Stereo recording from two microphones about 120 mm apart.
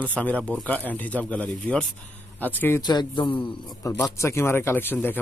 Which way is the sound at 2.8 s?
35° left (ahead or behind).